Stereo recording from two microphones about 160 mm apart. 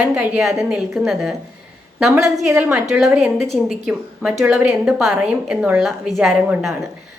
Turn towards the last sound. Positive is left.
turn(degrees=0)  # may be behind; listen again after turning